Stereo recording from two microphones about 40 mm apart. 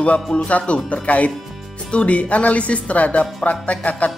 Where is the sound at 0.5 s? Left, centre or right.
Left.